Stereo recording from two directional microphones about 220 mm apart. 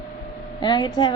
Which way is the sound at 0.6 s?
20° left (ahead or behind).